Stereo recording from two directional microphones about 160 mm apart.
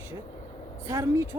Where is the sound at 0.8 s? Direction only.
15° right (ahead or behind).